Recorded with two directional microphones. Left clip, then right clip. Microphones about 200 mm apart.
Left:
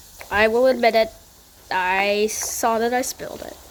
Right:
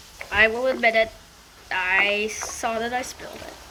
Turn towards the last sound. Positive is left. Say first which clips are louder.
# left 6 dB
turn(degrees=55)  # may be behind; listen again after turning